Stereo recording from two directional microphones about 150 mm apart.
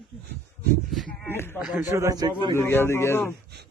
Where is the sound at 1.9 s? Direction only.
20° right (ahead or behind).